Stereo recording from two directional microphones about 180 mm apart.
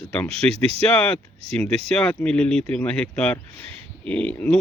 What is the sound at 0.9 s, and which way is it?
Speech, 10° left (ahead or behind).